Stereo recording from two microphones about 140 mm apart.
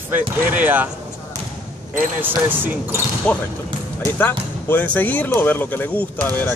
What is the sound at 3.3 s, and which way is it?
Speech, 5° left (ahead or behind).